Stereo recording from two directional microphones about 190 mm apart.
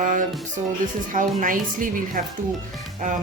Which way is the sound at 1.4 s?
45° right (ahead or behind).